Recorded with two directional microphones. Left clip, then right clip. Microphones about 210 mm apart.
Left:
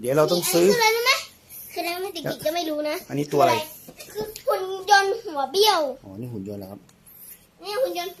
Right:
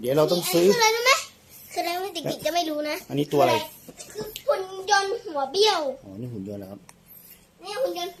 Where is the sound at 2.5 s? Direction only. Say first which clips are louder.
Right 2 dB; 10° right (ahead or behind).